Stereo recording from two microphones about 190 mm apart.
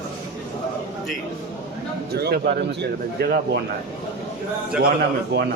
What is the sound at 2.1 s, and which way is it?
Speech, 55° right (ahead or behind).